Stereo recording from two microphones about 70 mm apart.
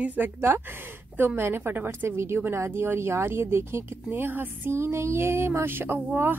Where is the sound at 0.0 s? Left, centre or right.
Right.